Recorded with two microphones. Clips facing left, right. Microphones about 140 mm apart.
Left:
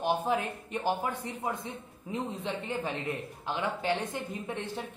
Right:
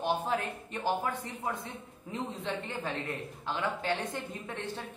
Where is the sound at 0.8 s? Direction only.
15° left (ahead or behind).